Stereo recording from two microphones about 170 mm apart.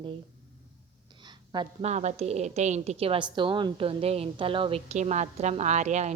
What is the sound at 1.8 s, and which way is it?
A woman's voice, 40° right (ahead or behind).